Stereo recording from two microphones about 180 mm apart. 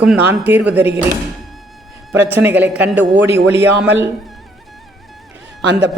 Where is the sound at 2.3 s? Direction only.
10° right (ahead or behind).